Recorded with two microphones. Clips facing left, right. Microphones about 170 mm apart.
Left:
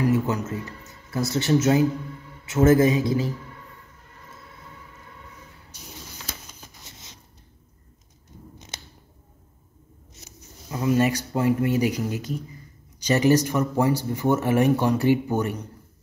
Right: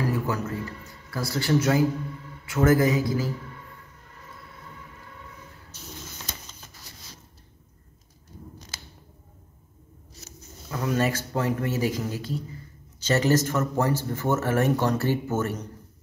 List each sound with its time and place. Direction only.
0.0 s a man's voice: 20° left (ahead or behind)
5.7 s a sound: 10° left (ahead or behind)
10.8 s speech: 10° left (ahead or behind)